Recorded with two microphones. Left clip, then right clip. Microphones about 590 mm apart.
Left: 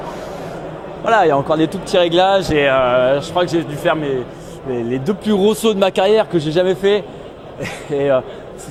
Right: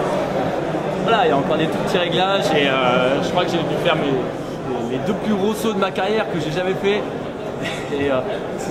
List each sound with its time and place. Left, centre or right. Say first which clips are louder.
1.0 s speech: left 4 dB; left
5.0 s speech: left 7 dB; left